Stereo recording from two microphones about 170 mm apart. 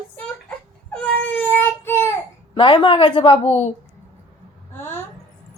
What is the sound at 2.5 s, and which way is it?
A woman's voice, 30° left (ahead or behind).